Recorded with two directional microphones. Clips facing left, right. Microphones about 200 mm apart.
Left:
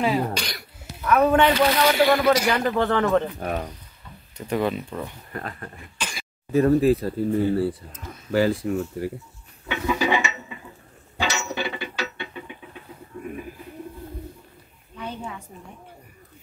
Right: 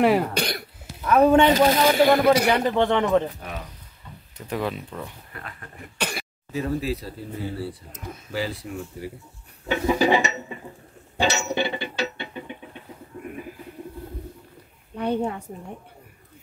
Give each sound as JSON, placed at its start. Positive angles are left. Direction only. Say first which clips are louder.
{"t": 0.0, "sound": "speech", "louder": "right 4 dB", "side_deg": -60}
{"t": 1.0, "sound": "speech", "louder": "right 2 dB", "side_deg": -30}
{"t": 2.0, "sound": "a man's voice", "louder": "right 2 dB", "side_deg": -20}
{"t": 3.3, "sound": "speech", "louder": "left 8 dB", "side_deg": 50}
{"t": 4.4, "sound": "speech", "louder": "left 4 dB", "side_deg": 0}
{"t": 5.3, "sound": "speech", "louder": "left 7 dB", "side_deg": 40}
{"t": 5.9, "sound": "speech", "louder": "right 6 dB", "side_deg": -60}
{"t": 6.5, "sound": "speech", "louder": "left 9 dB", "side_deg": 55}
{"t": 9.7, "sound": "dishes", "louder": "right 3 dB", "side_deg": -40}
{"t": 11.1, "sound": "music", "louder": "right 4 dB", "side_deg": -30}
{"t": 15.0, "sound": "a woman's voice", "louder": "right 9 dB", "side_deg": -60}